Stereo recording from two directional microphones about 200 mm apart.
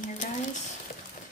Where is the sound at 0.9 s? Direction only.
35° left (ahead or behind).